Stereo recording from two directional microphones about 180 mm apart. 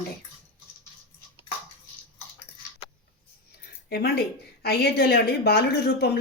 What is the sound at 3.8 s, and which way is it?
A woman's voice, 65° left (ahead or behind).